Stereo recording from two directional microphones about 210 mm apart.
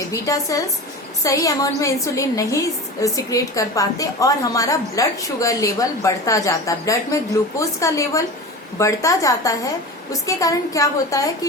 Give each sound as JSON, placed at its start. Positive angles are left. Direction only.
{"t": 0.1, "sound": "a woman's voice", "side_deg": 15}